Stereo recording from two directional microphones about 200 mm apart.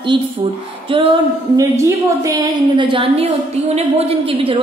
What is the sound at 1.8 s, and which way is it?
A woman's voice, 15° right (ahead or behind).